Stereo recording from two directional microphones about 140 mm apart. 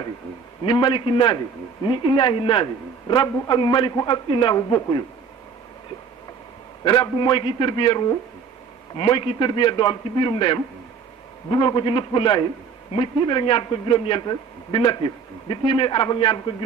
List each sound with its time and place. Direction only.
0.7 s a man's voice: 35° left (ahead or behind)
6.8 s a man's voice: 30° left (ahead or behind)